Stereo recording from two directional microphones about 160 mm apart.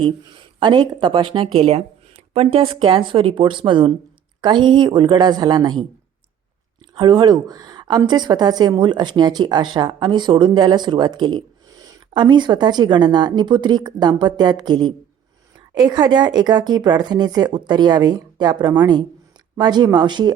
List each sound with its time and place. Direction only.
0.0 s a woman's voice: 30° right (ahead or behind)
6.9 s a woman's voice: 30° right (ahead or behind)